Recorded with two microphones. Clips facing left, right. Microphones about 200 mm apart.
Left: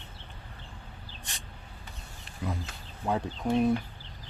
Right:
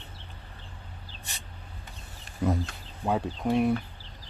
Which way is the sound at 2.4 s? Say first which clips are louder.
Right 8 dB; 45° right (ahead or behind).